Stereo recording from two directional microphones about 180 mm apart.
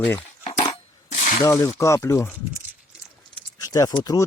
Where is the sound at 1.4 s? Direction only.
20° left (ahead or behind).